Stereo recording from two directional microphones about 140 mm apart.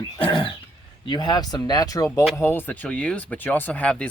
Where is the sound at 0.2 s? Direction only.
35° left (ahead or behind).